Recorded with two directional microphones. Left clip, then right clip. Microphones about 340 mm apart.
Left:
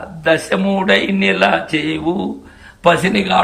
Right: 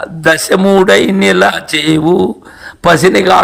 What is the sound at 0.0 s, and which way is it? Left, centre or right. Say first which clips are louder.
A man's voice: right 5 dB; centre.